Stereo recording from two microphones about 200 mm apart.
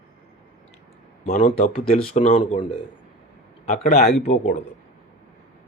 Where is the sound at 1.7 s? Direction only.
30° left (ahead or behind).